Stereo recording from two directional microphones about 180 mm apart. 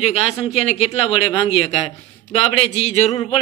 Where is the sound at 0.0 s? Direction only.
35° left (ahead or behind).